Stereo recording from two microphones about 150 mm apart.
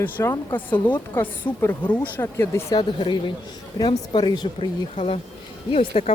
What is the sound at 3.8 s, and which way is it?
Speech, 30° left (ahead or behind).